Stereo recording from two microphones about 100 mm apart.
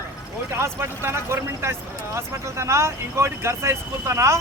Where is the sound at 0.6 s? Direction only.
25° right (ahead or behind).